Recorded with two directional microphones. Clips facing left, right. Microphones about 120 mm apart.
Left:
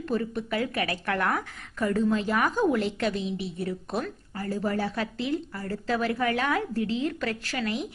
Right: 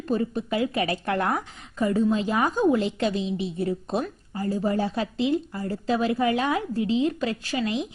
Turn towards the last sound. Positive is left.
turn(degrees=-20)  # may be behind; listen again after turning